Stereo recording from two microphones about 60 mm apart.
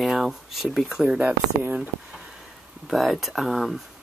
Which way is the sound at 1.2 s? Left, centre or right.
Right.